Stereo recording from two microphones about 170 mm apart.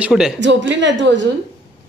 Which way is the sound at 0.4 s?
90° right.